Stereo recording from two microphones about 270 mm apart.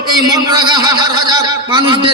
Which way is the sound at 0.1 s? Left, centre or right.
Centre.